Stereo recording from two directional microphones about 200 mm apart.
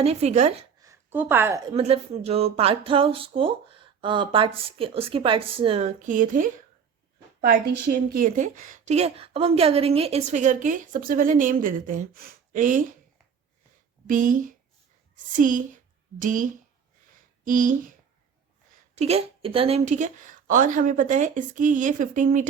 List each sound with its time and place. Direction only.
0.0 s a woman's voice: 30° right (ahead or behind)
0.8 s speech: 15° right (ahead or behind)
1.7 s a woman's voice: 30° right (ahead or behind)
14.1 s a woman's voice: 40° right (ahead or behind)
18.9 s a woman's voice: 30° right (ahead or behind)